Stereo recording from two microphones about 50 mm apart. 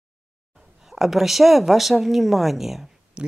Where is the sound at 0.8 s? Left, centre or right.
Centre.